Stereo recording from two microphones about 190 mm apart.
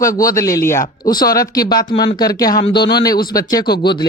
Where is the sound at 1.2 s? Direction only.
50° left (ahead or behind).